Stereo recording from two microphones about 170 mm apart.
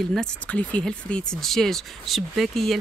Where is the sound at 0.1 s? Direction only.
5° left (ahead or behind).